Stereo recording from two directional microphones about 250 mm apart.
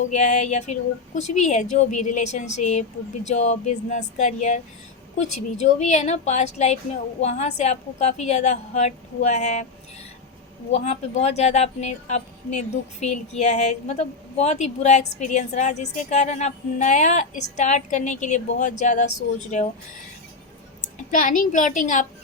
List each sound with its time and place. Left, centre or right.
0.1 s a woman's voice: left
5.6 s a woman's voice: left
10.8 s a woman's voice: left
21.1 s a woman's voice: left